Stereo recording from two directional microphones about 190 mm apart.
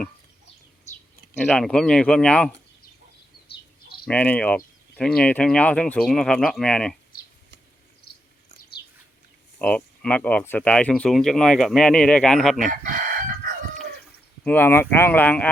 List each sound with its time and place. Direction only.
1.4 s speech: 5° left (ahead or behind)
4.0 s speech: 5° left (ahead or behind)
7.1 s a sound: 50° left (ahead or behind)
8.0 s cricket: 50° left (ahead or behind)
9.6 s speech: 5° left (ahead or behind)
12.7 s chicken: 45° right (ahead or behind)
14.4 s speech: 10° left (ahead or behind)